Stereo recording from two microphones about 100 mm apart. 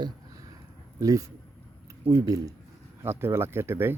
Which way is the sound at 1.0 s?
35° right (ahead or behind).